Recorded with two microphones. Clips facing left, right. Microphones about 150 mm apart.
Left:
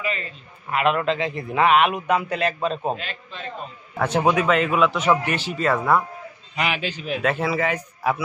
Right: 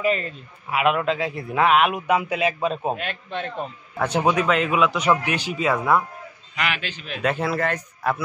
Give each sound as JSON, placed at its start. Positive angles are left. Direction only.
{"t": 0.0, "sound": "a man's voice", "side_deg": -45}
{"t": 0.7, "sound": "a man's voice", "side_deg": -5}
{"t": 3.0, "sound": "a man's voice", "side_deg": -60}
{"t": 4.0, "sound": "a man's voice", "side_deg": 0}
{"t": 6.5, "sound": "a man's voice", "side_deg": 30}
{"t": 7.1, "sound": "a man's voice", "side_deg": 0}